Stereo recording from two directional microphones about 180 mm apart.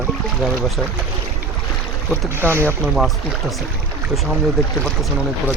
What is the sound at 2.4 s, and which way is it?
Speech, 10° right (ahead or behind).